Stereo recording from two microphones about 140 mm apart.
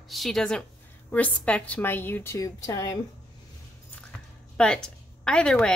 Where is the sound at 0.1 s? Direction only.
Centre (ahead or behind); by 3.0 s 25° left (ahead or behind).